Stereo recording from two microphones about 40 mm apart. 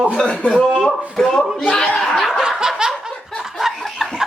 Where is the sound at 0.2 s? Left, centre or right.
Left.